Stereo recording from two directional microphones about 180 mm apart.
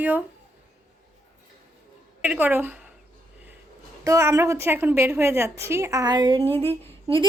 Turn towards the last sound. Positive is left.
turn(degrees=-30)  # may be behind; listen again after turning